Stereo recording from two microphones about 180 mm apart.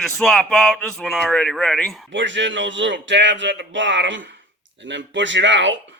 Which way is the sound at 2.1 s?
90° right.